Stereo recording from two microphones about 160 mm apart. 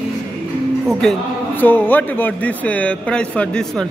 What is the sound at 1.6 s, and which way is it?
Speech, 10° left (ahead or behind).